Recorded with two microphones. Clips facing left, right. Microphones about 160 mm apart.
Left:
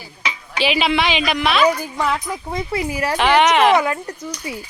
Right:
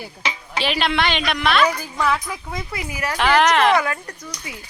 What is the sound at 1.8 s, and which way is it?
Speech, 20° left (ahead or behind).